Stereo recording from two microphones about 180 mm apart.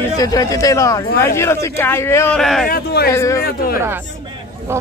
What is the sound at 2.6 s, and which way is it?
Speech, 55° left (ahead or behind).